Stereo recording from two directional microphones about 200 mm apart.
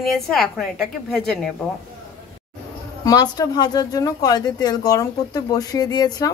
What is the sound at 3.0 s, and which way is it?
Speech, 20° left (ahead or behind).